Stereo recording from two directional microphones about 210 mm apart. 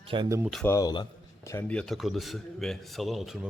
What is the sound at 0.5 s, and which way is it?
A man's voice, 10° left (ahead or behind).